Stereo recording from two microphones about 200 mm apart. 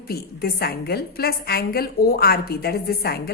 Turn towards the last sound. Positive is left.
turn(degrees=50)  # may be behind; listen again after turning